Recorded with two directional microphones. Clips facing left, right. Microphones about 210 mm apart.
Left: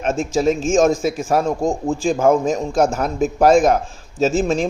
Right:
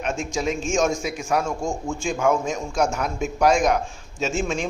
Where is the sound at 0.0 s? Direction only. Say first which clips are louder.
Left 7 dB; 40° left (ahead or behind).